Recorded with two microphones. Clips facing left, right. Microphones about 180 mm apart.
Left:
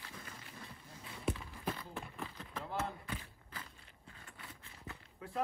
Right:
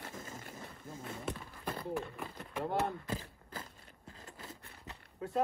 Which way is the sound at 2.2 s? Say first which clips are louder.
Right 6 dB; 55° right (ahead or behind).